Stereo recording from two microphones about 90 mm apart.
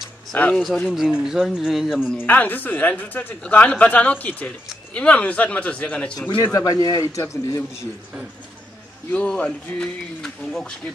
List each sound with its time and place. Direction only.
0.3 s speech: 15° left (ahead or behind)
0.8 s a man's voice: 5° right (ahead or behind)
2.1 s speech: 20° left (ahead or behind)
6.1 s a man's voice: 55° left (ahead or behind)
6.4 s a man's voice: 40° left (ahead or behind)
9.1 s speech: 15° left (ahead or behind)